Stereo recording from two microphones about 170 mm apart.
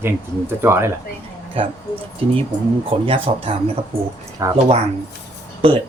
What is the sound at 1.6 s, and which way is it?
Speech, 35° right (ahead or behind).